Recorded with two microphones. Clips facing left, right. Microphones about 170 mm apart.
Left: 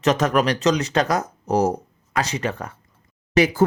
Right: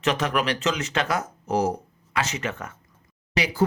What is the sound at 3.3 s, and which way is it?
Speech, 50° left (ahead or behind).